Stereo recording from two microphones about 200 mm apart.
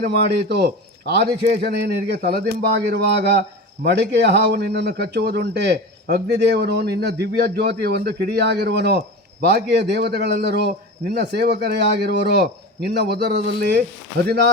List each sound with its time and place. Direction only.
0.0 s a man's voice: 55° right (ahead or behind)